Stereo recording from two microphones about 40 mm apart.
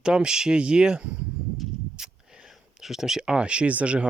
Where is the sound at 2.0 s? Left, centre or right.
Centre.